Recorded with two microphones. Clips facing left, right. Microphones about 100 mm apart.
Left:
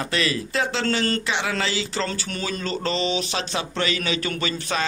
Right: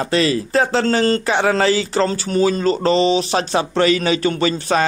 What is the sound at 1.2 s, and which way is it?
A man's voice, 40° right (ahead or behind).